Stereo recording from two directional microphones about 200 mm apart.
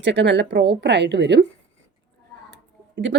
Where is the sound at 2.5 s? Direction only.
60° right (ahead or behind).